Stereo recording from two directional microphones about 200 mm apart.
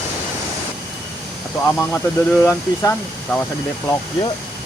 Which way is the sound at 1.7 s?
10° left (ahead or behind).